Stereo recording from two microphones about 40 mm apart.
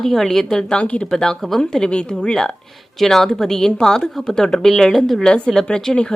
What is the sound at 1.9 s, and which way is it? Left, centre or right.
Speech, left.